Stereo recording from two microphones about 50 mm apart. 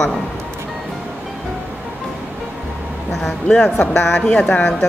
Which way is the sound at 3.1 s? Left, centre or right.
Centre.